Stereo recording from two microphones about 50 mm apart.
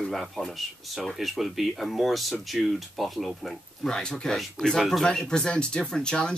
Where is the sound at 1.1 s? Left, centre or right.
Centre.